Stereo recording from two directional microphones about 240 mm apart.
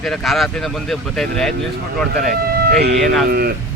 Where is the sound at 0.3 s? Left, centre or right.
Centre.